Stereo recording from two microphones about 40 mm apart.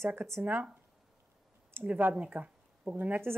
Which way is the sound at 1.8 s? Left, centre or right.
Right.